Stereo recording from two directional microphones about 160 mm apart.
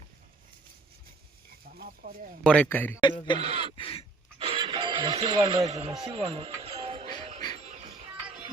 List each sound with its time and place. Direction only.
1.7 s speech: 65° right (ahead or behind)
2.4 s speech: 5° left (ahead or behind)
3.0 s speech: 30° left (ahead or behind)
3.4 s speech: 40° right (ahead or behind)
3.8 s a sound: 35° left (ahead or behind)
4.4 s music: 30° right (ahead or behind)
5.6 s speech: 45° right (ahead or behind)
6.0 s music: 30° right (ahead or behind)